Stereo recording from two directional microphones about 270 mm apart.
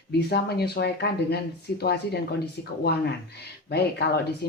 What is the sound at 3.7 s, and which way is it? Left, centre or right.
Speech, left.